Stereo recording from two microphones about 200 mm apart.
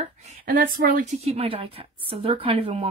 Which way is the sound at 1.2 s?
30° right (ahead or behind).